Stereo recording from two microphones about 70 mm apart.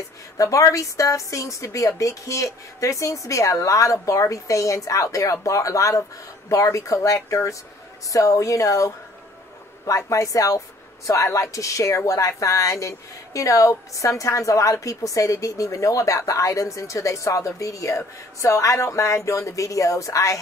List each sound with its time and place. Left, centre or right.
0.4 s a woman's voice: left